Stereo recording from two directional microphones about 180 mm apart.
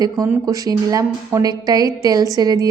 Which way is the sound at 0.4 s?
20° right (ahead or behind).